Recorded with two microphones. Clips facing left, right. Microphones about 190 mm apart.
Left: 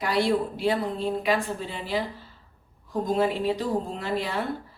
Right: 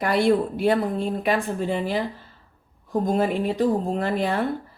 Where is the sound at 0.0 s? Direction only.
55° right (ahead or behind).